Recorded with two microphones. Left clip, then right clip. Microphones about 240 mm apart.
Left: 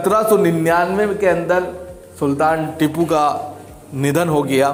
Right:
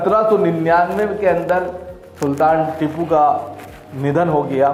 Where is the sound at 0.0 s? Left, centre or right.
Left.